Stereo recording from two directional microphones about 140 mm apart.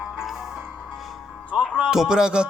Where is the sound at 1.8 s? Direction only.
5° right (ahead or behind).